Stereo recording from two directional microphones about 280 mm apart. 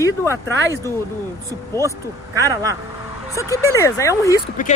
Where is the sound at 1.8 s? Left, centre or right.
Centre.